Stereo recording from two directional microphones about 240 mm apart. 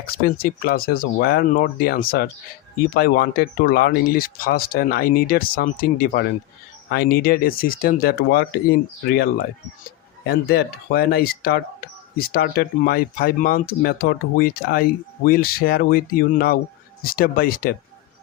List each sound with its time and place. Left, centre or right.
0.0 s speech: left